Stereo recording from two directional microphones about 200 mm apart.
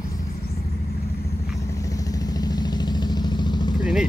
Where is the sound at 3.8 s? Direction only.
Centre (ahead or behind).